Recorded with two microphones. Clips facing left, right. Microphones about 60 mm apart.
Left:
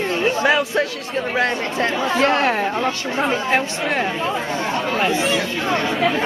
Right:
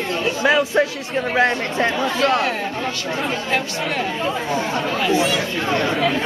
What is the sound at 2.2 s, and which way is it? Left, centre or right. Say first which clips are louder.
Speech: left 1 dB; left.